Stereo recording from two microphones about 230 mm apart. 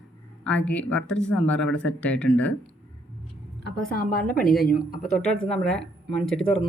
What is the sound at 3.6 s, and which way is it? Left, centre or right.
A woman's voice, left.